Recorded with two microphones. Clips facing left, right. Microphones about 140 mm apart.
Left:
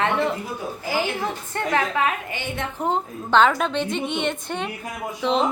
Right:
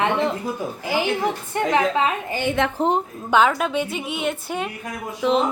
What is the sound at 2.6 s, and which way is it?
Speech, 90° right.